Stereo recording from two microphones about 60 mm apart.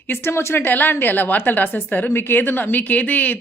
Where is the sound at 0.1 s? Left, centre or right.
Left.